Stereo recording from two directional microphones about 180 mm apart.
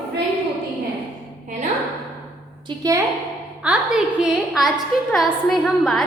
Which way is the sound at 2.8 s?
20° right (ahead or behind).